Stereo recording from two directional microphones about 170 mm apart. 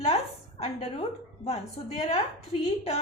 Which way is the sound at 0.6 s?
35° left (ahead or behind).